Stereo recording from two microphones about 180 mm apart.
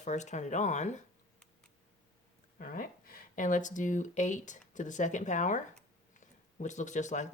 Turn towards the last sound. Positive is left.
turn(degrees=40)  # may be behind; listen again after turning